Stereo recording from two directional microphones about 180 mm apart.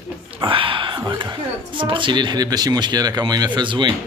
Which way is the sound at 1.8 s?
25° right (ahead or behind).